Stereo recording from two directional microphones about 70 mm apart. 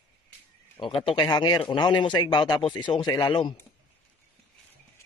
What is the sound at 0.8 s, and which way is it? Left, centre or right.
Speech, left.